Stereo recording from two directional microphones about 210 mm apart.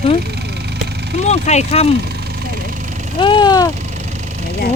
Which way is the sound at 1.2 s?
30° left (ahead or behind).